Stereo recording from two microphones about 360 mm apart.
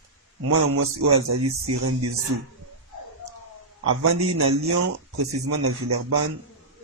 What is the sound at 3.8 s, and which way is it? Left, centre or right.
Speech, right.